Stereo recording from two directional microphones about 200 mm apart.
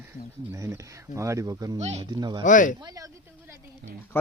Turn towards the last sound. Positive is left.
turn(degrees=-50)  # may be behind; listen again after turning